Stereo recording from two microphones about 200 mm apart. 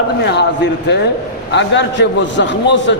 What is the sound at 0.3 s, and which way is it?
A man's voice, 60° left (ahead or behind).